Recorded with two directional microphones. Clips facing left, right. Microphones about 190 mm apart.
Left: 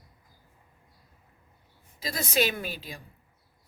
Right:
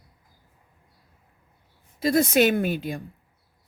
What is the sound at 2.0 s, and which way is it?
A woman's voice, 55° right (ahead or behind).